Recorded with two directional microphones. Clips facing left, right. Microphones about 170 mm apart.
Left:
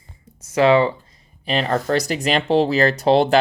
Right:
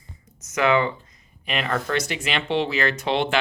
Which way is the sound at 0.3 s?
30° left (ahead or behind).